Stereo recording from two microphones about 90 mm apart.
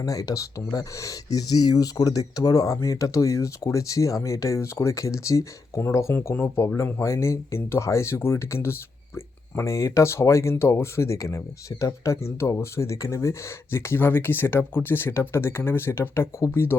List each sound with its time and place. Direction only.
0.0 s speech: 40° left (ahead or behind)